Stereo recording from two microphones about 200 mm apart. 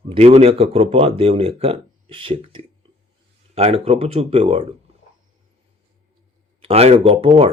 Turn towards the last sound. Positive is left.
turn(degrees=-30)  # may be behind; listen again after turning